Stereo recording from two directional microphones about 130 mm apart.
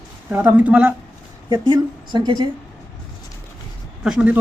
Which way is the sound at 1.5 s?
35° right (ahead or behind).